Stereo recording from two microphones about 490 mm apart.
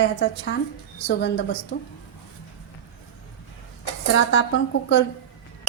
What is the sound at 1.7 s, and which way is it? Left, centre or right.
Speech, left.